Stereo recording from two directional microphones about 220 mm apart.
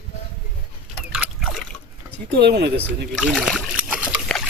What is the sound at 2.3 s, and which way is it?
Speech, 45° right (ahead or behind).